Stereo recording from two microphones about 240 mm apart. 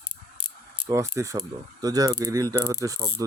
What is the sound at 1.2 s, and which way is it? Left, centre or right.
Mechanisms, centre.